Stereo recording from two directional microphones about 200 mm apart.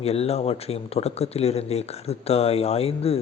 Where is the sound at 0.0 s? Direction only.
30° left (ahead or behind).